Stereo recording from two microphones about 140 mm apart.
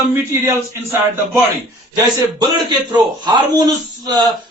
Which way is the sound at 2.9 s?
30° right (ahead or behind).